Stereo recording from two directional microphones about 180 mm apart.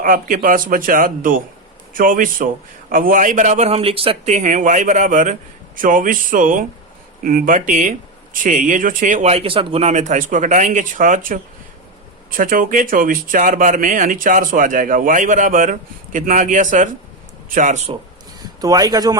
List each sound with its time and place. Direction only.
0.0 s speech: 50° right (ahead or behind)
18.3 s speech: 20° right (ahead or behind)